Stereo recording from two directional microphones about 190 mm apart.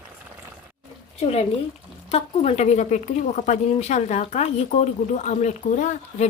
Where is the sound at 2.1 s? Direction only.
30° left (ahead or behind).